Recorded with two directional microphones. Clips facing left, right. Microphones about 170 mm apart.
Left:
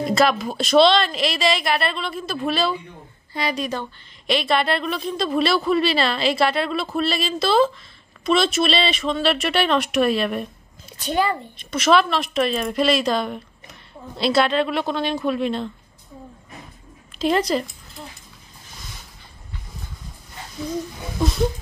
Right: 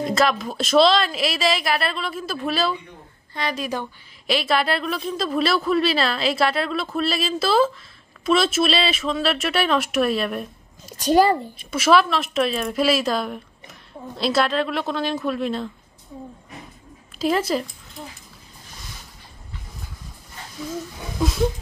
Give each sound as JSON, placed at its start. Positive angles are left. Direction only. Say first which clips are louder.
{"t": 0.0, "sound": "speech", "louder": "left 2 dB", "side_deg": 0}
{"t": 10.9, "sound": "a child's voice", "louder": "right 6 dB", "side_deg": -40}
{"t": 11.5, "sound": "speech", "louder": "left 3 dB", "side_deg": -5}
{"t": 17.2, "sound": "speech", "louder": "left 1 dB", "side_deg": -5}